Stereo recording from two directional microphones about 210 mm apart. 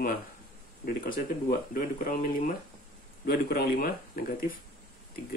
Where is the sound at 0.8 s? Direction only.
45° left (ahead or behind).